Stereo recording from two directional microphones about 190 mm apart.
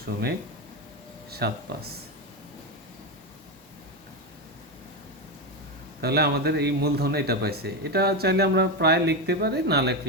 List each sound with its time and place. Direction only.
1.3 s speech: 55° right (ahead or behind)
6.0 s speech: 55° right (ahead or behind)